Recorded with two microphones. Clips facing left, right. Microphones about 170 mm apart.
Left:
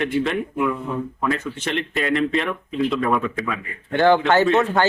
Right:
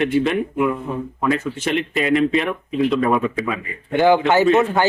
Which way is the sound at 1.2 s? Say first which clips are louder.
Right 5 dB; 5° right (ahead or behind).